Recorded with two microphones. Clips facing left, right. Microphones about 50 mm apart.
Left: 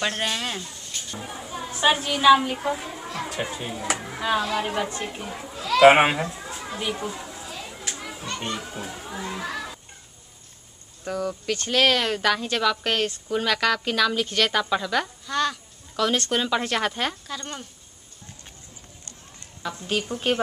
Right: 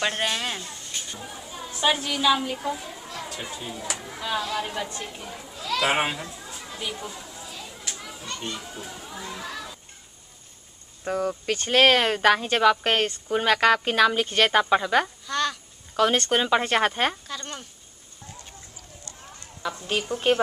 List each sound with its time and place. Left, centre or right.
0.0 s speech: centre
1.2 s a child's voice: left
5.8 s children playing: left
8.4 s a child's voice: left
8.8 s speech: left
11.1 s speech: right
15.2 s speech: centre
16.3 s speech: right
17.3 s speech: centre
19.6 s a woman's voice: centre